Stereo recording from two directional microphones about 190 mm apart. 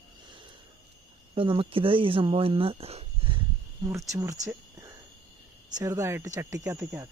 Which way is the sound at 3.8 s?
15° right (ahead or behind).